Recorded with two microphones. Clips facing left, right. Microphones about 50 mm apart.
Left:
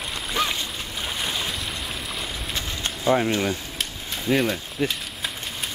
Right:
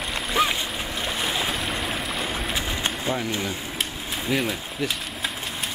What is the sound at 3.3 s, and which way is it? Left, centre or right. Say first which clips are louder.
Speech: left 4 dB; left.